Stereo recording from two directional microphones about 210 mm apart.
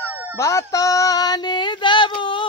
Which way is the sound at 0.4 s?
15° left (ahead or behind).